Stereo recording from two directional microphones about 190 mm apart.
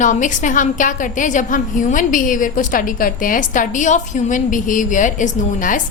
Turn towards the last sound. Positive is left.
turn(degrees=40)  # may be behind; listen again after turning